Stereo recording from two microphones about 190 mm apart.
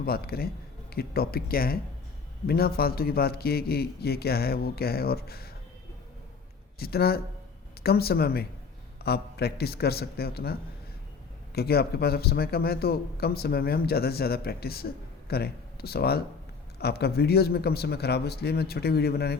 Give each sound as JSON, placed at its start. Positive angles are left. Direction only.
{"t": 0.0, "sound": "a man's voice", "side_deg": 55}
{"t": 6.7, "sound": "a man's voice", "side_deg": 55}